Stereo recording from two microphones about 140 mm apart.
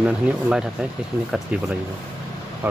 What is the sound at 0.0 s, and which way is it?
Speech, 5° right (ahead or behind).